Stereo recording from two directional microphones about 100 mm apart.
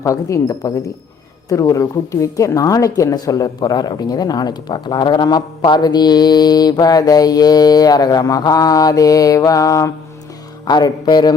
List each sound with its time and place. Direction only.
0.0 s a woman's voice: 35° left (ahead or behind)